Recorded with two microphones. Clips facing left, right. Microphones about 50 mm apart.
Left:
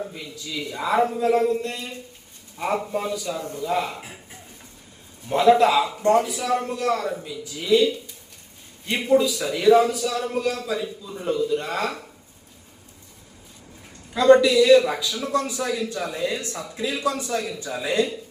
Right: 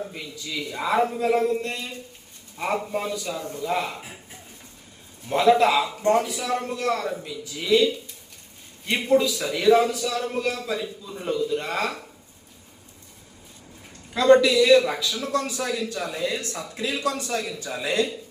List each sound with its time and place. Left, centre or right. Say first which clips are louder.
0.2 s a man's voice: even; centre
14.1 s a man's voice: left 1 dB; centre
15.2 s speech: left 3 dB; centre
16.0 s a man's voice: left 1 dB; centre